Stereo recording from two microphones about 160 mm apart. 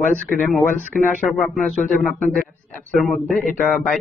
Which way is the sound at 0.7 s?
55° left (ahead or behind).